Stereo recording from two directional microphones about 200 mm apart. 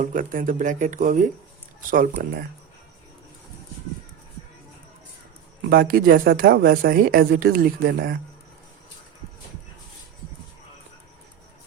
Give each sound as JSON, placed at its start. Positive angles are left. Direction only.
{"t": 0.0, "sound": "speech", "side_deg": -40}
{"t": 5.7, "sound": "speech", "side_deg": -45}